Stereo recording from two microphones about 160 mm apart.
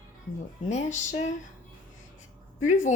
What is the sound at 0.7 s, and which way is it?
Speech, 45° left (ahead or behind).